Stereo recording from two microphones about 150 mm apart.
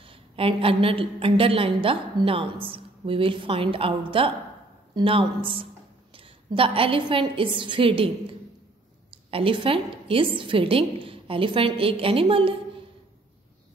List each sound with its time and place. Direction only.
0.0 s a woman's voice: 40° right (ahead or behind)
9.3 s a woman's voice: 35° right (ahead or behind)